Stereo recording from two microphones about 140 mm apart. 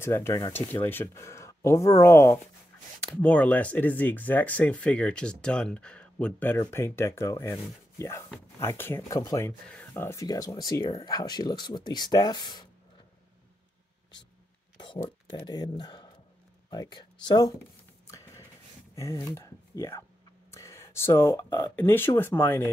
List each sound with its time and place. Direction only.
0.0 s speech: 15° left (ahead or behind)
3.0 s speech: 10° left (ahead or behind)
9.2 s speech: 25° left (ahead or behind)
9.7 s speech: 15° left (ahead or behind); by 12.6 s 30° left (ahead or behind)
14.8 s speech: 35° left (ahead or behind)
18.0 s a sound: 20° left (ahead or behind)
18.9 s speech: 25° left (ahead or behind)